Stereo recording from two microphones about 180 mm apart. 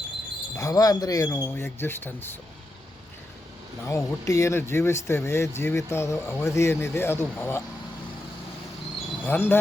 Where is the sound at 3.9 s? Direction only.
15° left (ahead or behind).